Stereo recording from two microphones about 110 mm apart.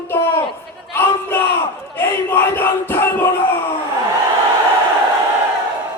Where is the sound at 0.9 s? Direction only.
20° left (ahead or behind).